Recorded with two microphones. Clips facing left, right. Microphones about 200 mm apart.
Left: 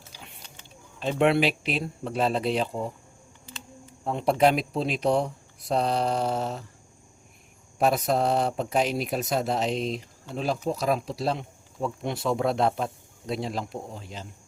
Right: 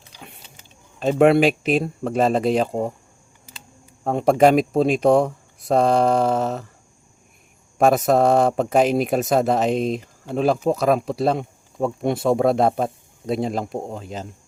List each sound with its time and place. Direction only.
0.9 s speech: 45° right (ahead or behind)
4.0 s speech: 45° right (ahead or behind)
7.8 s speech: 50° right (ahead or behind)